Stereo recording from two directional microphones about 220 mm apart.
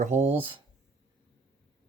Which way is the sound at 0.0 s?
30° right (ahead or behind).